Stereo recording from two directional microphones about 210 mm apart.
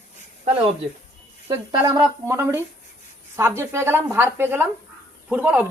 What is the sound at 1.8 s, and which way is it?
Speech, 20° right (ahead or behind).